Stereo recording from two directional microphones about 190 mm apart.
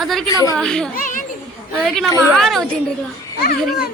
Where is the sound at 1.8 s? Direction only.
Centre (ahead or behind).